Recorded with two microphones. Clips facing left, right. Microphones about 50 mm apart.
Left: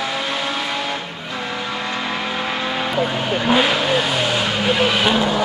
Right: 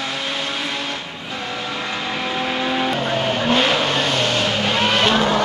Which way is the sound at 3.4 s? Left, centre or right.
Centre.